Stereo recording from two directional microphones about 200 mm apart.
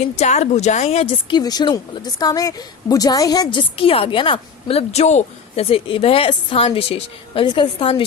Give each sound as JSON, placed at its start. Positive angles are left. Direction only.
{"t": 0.2, "sound": "speech", "side_deg": 35}